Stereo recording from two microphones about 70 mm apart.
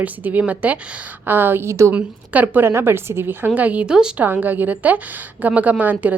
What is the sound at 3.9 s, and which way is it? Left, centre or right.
Speech, centre.